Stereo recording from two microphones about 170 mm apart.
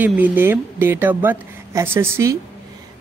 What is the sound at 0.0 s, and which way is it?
Speech, 10° right (ahead or behind).